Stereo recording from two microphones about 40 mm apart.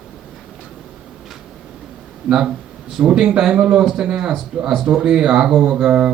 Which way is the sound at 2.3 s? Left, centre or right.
Centre.